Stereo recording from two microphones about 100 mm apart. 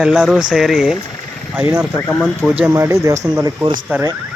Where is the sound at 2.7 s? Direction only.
30° right (ahead or behind).